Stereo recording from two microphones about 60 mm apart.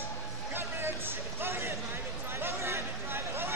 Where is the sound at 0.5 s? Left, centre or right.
Right.